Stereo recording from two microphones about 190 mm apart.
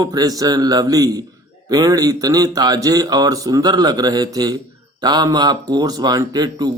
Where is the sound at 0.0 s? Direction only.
20° right (ahead or behind).